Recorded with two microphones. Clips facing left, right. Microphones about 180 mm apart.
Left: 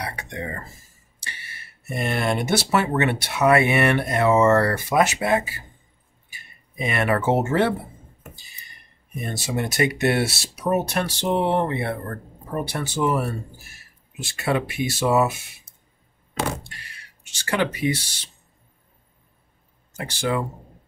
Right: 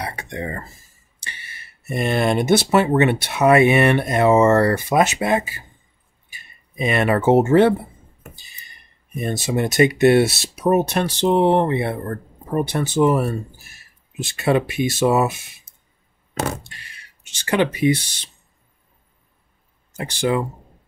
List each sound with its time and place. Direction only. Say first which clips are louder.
0.0 s a sound: right 3 dB; 30° right (ahead or behind)
2.0 s speech: right 6 dB; 20° right (ahead or behind)
6.8 s speech: right 4 dB; 25° right (ahead or behind)
9.3 s speech: right 5 dB; 20° right (ahead or behind)
14.2 s speech: right 5 dB; 25° right (ahead or behind)
16.4 s a sound: right 2 dB; 45° right (ahead or behind)
17.2 s speech: right 4 dB; 20° right (ahead or behind)
20.2 s speech: right 4 dB; 20° right (ahead or behind)